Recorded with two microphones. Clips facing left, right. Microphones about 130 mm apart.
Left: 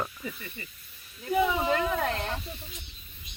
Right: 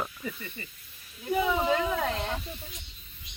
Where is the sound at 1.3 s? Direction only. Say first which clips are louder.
Even; centre (ahead or behind).